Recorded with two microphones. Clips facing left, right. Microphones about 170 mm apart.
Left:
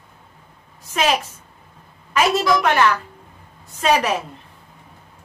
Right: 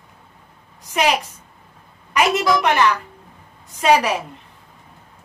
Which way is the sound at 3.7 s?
10° right (ahead or behind).